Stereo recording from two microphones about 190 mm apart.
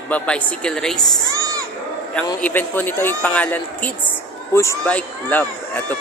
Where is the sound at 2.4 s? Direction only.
10° left (ahead or behind).